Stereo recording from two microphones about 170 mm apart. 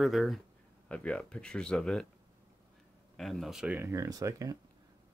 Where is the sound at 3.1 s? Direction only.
Centre (ahead or behind).